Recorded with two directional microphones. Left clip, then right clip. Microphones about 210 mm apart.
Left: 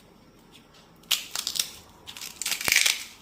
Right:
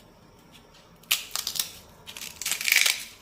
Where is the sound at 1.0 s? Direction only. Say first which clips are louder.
Even; 5° right (ahead or behind).